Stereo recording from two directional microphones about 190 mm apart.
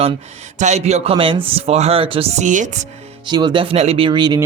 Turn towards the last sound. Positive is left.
turn(degrees=-25)  # may be behind; listen again after turning